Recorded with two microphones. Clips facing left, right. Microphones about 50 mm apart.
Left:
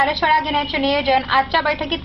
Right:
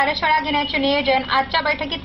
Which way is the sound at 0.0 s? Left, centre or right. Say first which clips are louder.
Left 2 dB; centre.